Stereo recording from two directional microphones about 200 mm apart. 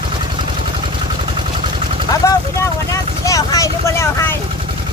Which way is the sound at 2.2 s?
15° left (ahead or behind).